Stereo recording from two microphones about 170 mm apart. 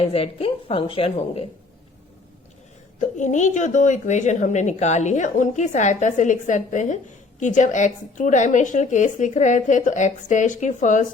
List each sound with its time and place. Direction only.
0.0 s a woman's voice: 35° left (ahead or behind)
3.2 s a woman's voice: 45° left (ahead or behind)